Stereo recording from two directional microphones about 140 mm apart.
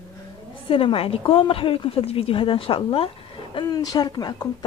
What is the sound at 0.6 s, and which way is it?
A woman's voice, 40° left (ahead or behind).